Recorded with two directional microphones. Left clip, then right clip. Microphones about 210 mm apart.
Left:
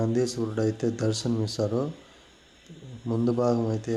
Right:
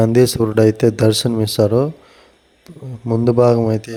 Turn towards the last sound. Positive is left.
turn(degrees=-35)  # may be behind; listen again after turning